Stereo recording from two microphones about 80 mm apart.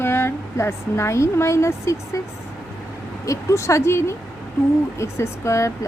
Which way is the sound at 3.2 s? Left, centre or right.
Left.